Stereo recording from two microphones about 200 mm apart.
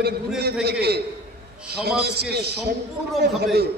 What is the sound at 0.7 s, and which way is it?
A man's voice, 55° right (ahead or behind).